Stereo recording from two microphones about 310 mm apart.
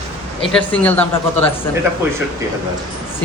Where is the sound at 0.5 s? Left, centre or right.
Centre.